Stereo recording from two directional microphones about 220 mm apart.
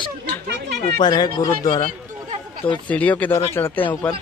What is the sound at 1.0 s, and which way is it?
Speech, 20° left (ahead or behind).